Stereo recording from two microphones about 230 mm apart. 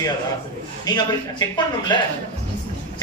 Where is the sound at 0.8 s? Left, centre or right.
Centre.